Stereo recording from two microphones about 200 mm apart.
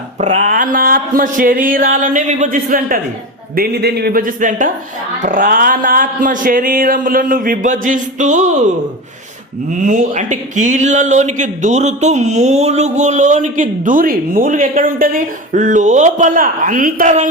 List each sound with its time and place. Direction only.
0.2 s a sound: 35° right (ahead or behind)
5.2 s speech: 40° right (ahead or behind)
9.7 s speech: 40° right (ahead or behind)